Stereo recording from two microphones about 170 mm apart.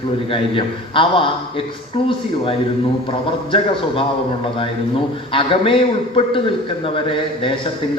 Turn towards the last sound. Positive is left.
turn(degrees=30)  # may be behind; listen again after turning